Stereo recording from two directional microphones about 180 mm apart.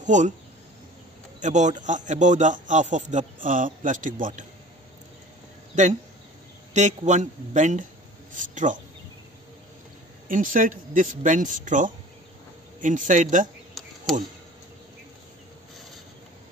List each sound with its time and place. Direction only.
0.0 s speech: 45° right (ahead or behind)
1.4 s a man's voice: 40° right (ahead or behind)
5.7 s a man's voice: 40° right (ahead or behind)
10.2 s a man's voice: 50° right (ahead or behind)